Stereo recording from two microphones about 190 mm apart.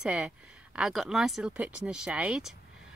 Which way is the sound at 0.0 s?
5° right (ahead or behind).